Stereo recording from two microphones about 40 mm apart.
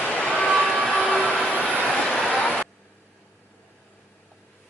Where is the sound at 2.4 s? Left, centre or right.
Left.